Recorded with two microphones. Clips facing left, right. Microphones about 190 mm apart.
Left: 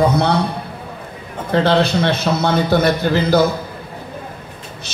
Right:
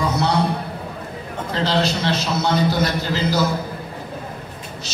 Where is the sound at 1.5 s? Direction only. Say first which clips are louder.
Left 6 dB; 60° left (ahead or behind).